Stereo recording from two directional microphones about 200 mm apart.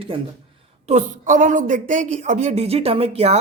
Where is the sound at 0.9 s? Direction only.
35° right (ahead or behind).